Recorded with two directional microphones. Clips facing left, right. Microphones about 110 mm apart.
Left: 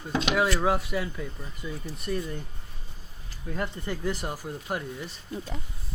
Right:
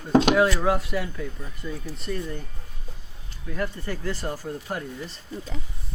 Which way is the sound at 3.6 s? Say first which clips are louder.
Right 2 dB; 20° left (ahead or behind).